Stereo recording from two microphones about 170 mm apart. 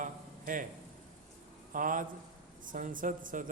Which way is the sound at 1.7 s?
50° right (ahead or behind).